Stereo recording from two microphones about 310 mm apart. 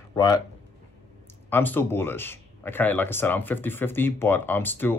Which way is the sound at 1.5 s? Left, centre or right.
Centre.